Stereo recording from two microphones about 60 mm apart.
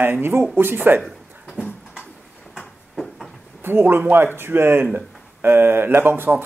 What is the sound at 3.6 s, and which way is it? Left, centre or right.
Speech, right.